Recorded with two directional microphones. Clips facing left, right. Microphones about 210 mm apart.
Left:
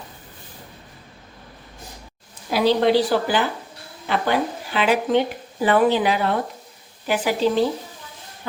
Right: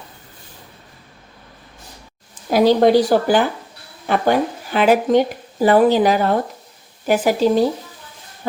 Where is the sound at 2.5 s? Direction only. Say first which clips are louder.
Right 5 dB; 45° right (ahead or behind).